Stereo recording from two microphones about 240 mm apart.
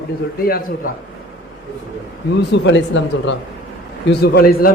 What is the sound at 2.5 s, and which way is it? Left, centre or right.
Speech, left.